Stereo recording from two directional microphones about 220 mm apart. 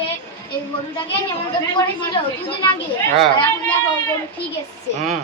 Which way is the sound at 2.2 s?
25° left (ahead or behind).